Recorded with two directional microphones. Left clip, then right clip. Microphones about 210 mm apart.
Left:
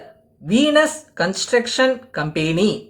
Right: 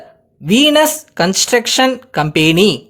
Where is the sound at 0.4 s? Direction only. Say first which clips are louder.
Right 5 dB; 45° right (ahead or behind).